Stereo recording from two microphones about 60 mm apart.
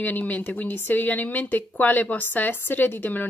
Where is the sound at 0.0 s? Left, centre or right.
Left.